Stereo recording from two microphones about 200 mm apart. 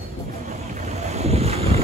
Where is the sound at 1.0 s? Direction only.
30° right (ahead or behind).